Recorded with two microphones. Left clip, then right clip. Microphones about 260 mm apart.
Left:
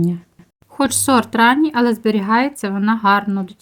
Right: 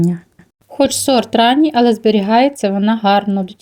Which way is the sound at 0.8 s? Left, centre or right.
Centre.